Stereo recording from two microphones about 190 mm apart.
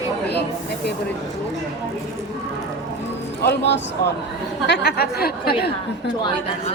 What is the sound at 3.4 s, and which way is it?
Speech, 60° left (ahead or behind).